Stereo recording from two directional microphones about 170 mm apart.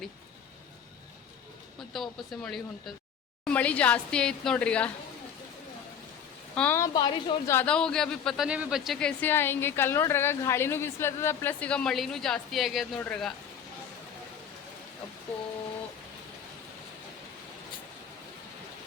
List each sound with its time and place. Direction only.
1.9 s speech: centre (ahead or behind)
6.6 s speech: 15° left (ahead or behind)
6.9 s a woman's voice: 25° left (ahead or behind)
7.5 s speech: 10° left (ahead or behind)